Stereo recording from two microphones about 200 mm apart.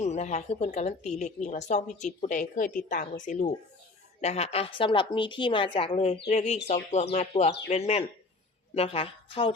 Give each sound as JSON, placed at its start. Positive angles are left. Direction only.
{"t": 0.0, "sound": "a woman's voice", "side_deg": 35}